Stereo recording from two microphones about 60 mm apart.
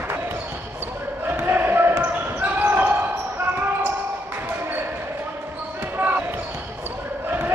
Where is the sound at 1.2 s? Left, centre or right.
Right.